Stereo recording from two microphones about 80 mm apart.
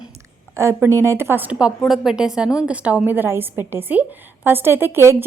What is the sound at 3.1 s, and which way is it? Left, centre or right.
A woman's voice, right.